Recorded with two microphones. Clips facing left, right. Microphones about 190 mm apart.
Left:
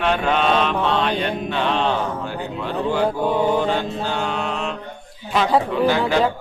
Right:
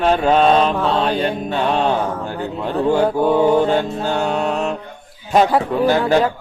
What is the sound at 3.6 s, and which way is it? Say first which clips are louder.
Music: right 4 dB; 45° right (ahead or behind).